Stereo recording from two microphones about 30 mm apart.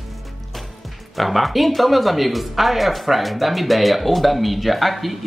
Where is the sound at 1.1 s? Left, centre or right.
Centre.